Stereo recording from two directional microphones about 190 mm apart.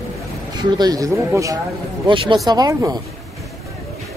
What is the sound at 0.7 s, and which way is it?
Speech, 20° right (ahead or behind).